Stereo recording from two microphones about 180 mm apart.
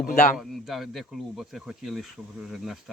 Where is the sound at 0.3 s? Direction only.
Centre (ahead or behind).